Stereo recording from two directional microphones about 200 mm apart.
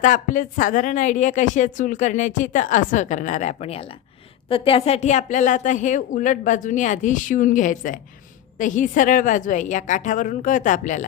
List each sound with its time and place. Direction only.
0.0 s a woman's voice: 40° left (ahead or behind)